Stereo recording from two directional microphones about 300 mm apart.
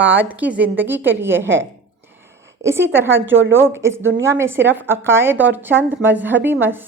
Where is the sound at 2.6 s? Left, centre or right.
Centre.